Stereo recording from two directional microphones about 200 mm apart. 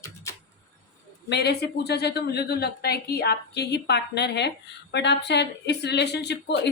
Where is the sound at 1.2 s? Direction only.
55° left (ahead or behind).